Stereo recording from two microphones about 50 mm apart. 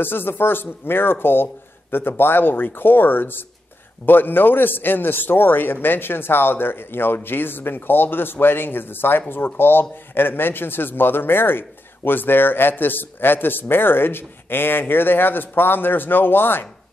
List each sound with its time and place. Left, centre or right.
0.0 s a man's voice: left